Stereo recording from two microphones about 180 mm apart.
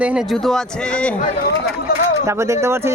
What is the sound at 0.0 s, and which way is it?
Speech, 5° right (ahead or behind).